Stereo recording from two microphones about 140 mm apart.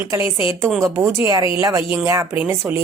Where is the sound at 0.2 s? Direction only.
40° left (ahead or behind).